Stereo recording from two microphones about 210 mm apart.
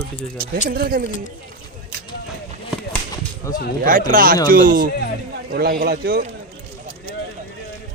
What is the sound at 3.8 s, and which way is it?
Speech, 40° right (ahead or behind).